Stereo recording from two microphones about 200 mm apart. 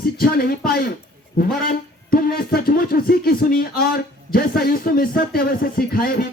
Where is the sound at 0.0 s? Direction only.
50° left (ahead or behind).